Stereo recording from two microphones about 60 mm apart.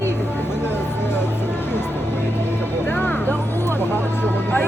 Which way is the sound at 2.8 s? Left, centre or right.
Left.